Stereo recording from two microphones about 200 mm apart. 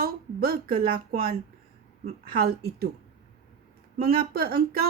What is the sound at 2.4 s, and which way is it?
Speech, 50° right (ahead or behind).